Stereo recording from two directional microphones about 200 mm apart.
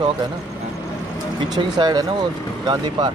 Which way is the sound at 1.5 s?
20° right (ahead or behind).